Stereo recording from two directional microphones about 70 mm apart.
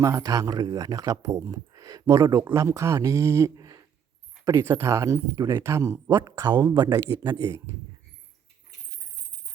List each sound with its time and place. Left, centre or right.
0.0 s speech: right
1.5 s speech: right
3.5 s a sound: right
4.6 s speech: right
6.2 s a man's voice: right
7.0 s speech: right